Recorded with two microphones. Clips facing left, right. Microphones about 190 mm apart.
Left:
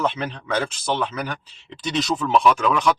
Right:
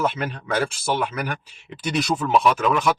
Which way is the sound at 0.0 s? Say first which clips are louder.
Even; 10° right (ahead or behind).